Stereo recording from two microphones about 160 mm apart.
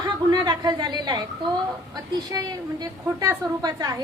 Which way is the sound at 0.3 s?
25° right (ahead or behind).